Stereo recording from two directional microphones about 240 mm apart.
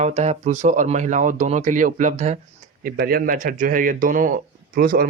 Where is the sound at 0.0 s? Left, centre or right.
Right.